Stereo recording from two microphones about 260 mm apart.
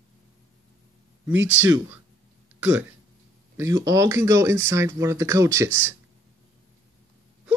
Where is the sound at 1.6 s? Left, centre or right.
Centre.